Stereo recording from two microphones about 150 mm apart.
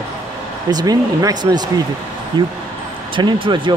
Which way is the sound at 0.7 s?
25° right (ahead or behind).